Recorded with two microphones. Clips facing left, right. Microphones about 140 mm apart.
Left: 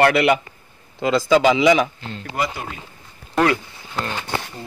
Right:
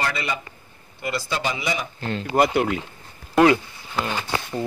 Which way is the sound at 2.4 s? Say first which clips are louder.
Right 7 dB; 80° right.